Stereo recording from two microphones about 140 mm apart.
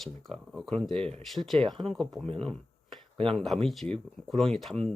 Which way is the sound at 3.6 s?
Centre (ahead or behind).